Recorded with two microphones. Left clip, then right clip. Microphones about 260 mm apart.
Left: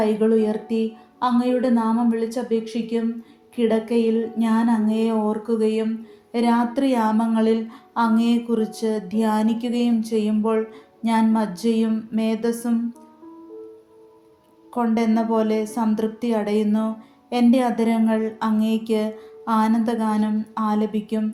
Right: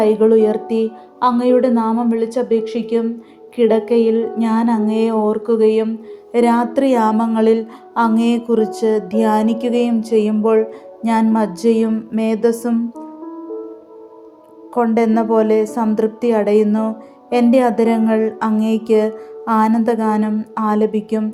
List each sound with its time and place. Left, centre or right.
0.0 s a woman's voice: centre
14.8 s a woman's voice: centre